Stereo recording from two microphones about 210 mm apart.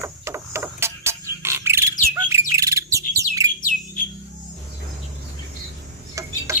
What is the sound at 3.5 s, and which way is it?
Bird, 40° left (ahead or behind).